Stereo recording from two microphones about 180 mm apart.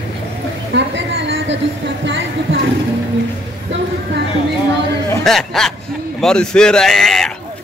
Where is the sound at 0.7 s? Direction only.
85° right.